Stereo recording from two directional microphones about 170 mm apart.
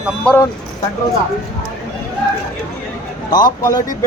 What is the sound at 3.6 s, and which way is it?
Speech, 20° left (ahead or behind).